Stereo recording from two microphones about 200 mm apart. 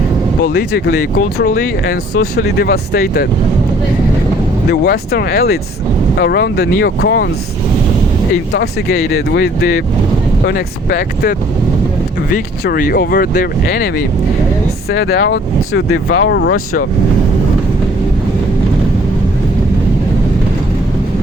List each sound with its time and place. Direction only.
0.4 s speech: 55° left (ahead or behind)
4.7 s speech: 50° left (ahead or behind)
8.5 s speech: 55° left (ahead or behind)
14.9 s speech: 55° left (ahead or behind)
16.1 s speech: 75° left (ahead or behind); by 16.8 s 50° left (ahead or behind)